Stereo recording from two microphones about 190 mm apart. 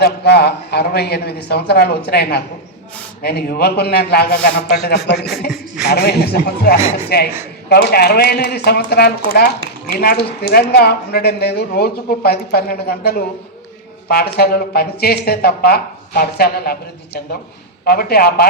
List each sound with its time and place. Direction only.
0.0 s a woman's voice: 60° left (ahead or behind)
17.8 s a woman's voice: 55° left (ahead or behind)